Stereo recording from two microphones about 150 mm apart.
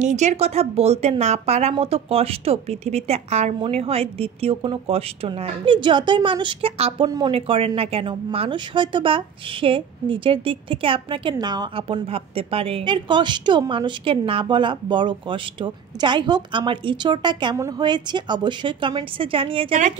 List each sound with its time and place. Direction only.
0.0 s a woman's voice: 50° right (ahead or behind)
7.1 s speech: 25° right (ahead or behind)
7.3 s a woman's voice: 40° right (ahead or behind)